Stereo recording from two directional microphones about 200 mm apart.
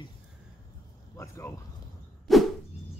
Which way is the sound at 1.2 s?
15° left (ahead or behind).